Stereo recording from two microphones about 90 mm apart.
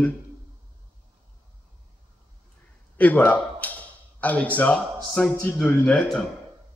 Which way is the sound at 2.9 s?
15° left (ahead or behind).